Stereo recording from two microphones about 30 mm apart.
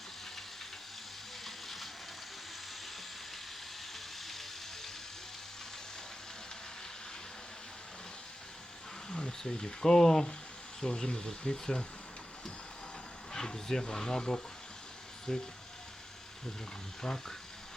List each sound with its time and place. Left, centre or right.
1.5 s a sound: centre
3.9 s music: centre
9.0 s speech: left
13.3 s speech: centre
17.0 s speech: centre